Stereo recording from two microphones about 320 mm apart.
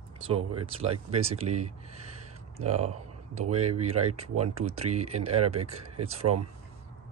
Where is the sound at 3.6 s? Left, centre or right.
Right.